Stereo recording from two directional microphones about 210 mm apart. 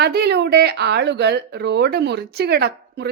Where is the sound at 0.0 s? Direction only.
50° right (ahead or behind).